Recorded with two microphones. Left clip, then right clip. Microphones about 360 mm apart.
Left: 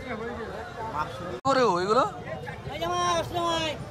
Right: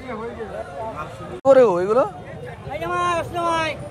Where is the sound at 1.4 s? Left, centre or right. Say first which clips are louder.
Right 9 dB; centre.